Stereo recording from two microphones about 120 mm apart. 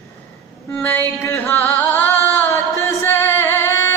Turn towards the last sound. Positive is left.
turn(degrees=20)  # may be behind; listen again after turning